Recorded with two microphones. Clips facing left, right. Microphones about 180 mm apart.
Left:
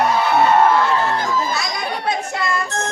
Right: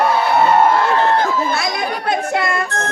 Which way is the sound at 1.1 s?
60° right (ahead or behind).